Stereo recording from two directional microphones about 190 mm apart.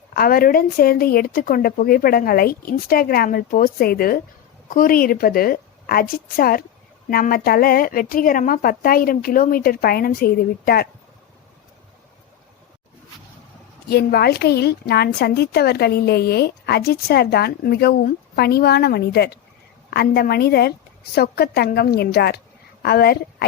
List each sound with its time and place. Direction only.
0.1 s speech: 50° left (ahead or behind)
13.8 s a woman's voice: 55° left (ahead or behind)